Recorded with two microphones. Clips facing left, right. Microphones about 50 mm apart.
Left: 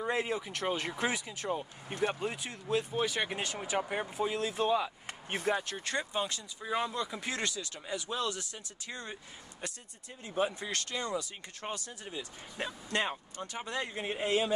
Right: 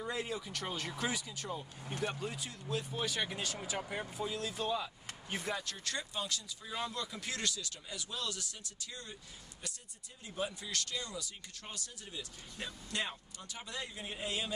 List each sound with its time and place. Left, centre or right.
0.0 s speech: left